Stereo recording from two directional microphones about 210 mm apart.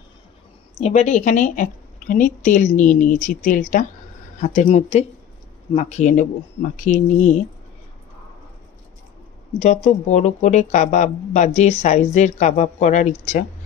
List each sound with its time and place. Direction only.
0.7 s speech: 30° left (ahead or behind)
9.6 s speech: 30° left (ahead or behind)